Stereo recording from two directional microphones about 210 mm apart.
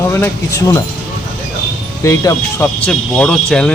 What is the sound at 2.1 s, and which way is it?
Speech, 10° left (ahead or behind).